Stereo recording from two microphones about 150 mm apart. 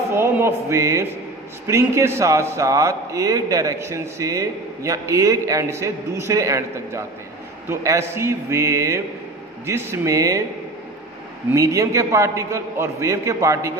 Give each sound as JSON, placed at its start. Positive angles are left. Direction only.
{"t": 0.1, "sound": "a man's voice", "side_deg": -15}
{"t": 11.5, "sound": "a man's voice", "side_deg": -20}